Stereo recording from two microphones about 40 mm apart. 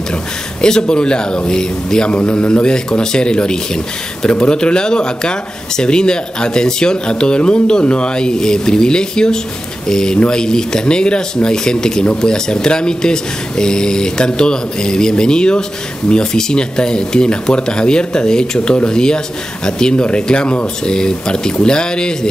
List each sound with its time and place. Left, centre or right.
0.1 s a man's voice: centre